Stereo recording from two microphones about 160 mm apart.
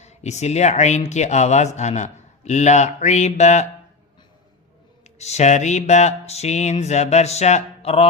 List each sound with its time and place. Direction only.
0.0 s speech: 45° left (ahead or behind)
5.1 s speech: 45° left (ahead or behind)